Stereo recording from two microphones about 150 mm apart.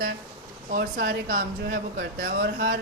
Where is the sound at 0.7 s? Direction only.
70° right (ahead or behind); by 2.8 s 85° right.